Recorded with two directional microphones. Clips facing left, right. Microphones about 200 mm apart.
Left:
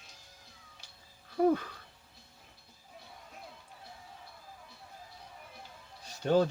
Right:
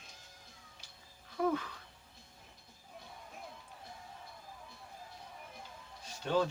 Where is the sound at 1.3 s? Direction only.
35° left (ahead or behind).